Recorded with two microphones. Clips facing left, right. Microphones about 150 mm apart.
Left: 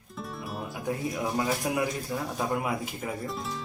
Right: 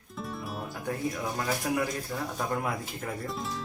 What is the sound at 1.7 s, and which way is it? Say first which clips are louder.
Speech: even; 20° left (ahead or behind).